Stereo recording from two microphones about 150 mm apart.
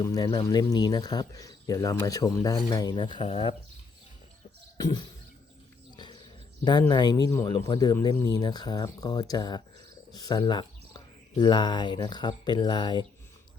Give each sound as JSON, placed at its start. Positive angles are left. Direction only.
{"t": 0.0, "sound": "speech", "side_deg": 25}
{"t": 4.8, "sound": "speech", "side_deg": 25}
{"t": 6.7, "sound": "speech", "side_deg": 30}